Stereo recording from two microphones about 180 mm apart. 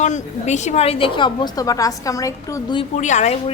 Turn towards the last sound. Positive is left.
turn(degrees=40)  # may be behind; listen again after turning